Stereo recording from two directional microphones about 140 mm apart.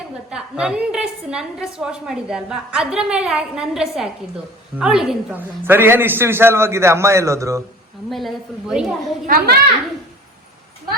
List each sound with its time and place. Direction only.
0.3 s a woman's voice: 5° right (ahead or behind)
5.4 s a man's voice: 15° right (ahead or behind)
8.1 s a woman's voice: centre (ahead or behind)
9.2 s a child's voice: 90° right